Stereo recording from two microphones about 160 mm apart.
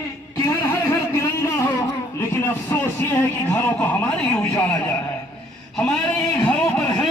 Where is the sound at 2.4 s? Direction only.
10° left (ahead or behind).